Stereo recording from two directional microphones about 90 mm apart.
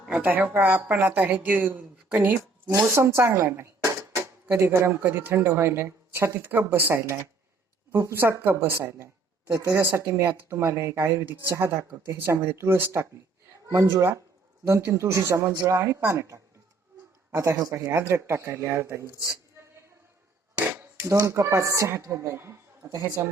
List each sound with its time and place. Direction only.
0.2 s speech: 20° right (ahead or behind)
2.9 s a woman's voice: 30° right (ahead or behind)
15.5 s speech: 45° right (ahead or behind)
15.8 s speech: 20° right (ahead or behind)
16.0 s a woman's voice: 35° right (ahead or behind)
20.7 s a sound: 30° right (ahead or behind)
21.2 s a woman's voice: 30° right (ahead or behind)